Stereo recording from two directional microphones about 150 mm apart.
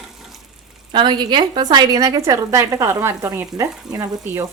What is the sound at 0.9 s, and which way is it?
A woman's voice, 30° right (ahead or behind).